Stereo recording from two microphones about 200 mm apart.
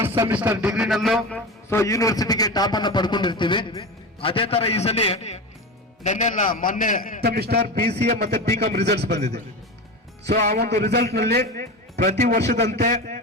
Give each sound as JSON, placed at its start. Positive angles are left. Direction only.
{"t": 0.0, "sound": "a man's voice", "side_deg": -10}
{"t": 1.7, "sound": "a man's voice", "side_deg": 15}
{"t": 7.2, "sound": "a man's voice", "side_deg": -50}
{"t": 10.2, "sound": "a man's voice", "side_deg": -50}